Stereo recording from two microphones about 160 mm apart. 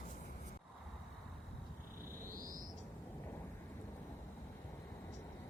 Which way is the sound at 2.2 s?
60° right (ahead or behind).